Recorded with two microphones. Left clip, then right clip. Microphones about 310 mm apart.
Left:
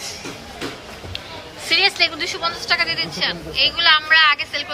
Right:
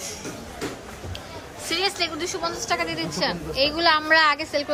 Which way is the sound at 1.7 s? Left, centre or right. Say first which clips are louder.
Left 8 dB; centre.